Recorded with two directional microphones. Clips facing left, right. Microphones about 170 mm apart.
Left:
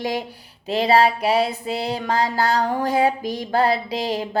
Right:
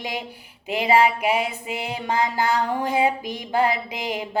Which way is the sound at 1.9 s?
20° right (ahead or behind).